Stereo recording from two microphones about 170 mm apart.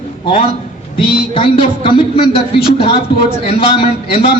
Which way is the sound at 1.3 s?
30° left (ahead or behind).